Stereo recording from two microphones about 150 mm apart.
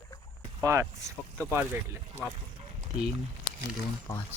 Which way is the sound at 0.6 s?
20° right (ahead or behind).